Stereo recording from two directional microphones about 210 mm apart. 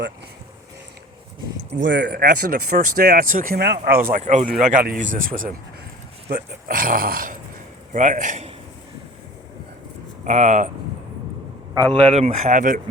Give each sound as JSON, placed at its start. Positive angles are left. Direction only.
{"t": 1.8, "sound": "speech", "side_deg": -55}
{"t": 4.1, "sound": "a man's voice", "side_deg": -35}
{"t": 10.2, "sound": "a man's voice", "side_deg": -35}
{"t": 12.0, "sound": "a man's voice", "side_deg": -30}